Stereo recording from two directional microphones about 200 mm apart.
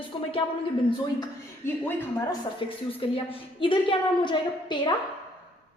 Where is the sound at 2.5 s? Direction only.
25° left (ahead or behind).